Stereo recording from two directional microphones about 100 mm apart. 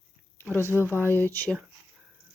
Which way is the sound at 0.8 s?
20° left (ahead or behind).